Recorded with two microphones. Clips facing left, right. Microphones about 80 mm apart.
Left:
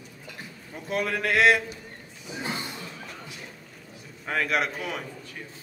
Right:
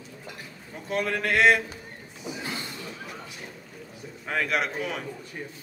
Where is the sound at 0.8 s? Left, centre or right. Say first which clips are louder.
Even; centre.